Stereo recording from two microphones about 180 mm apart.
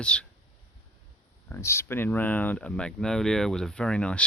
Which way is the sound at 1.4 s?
15° left (ahead or behind).